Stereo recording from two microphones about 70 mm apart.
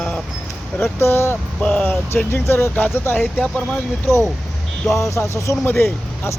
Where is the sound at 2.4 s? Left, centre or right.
Left.